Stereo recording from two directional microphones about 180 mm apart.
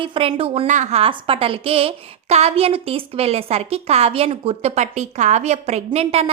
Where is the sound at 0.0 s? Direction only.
30° right (ahead or behind).